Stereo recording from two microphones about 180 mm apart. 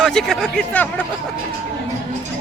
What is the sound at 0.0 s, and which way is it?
Speech, centre (ahead or behind).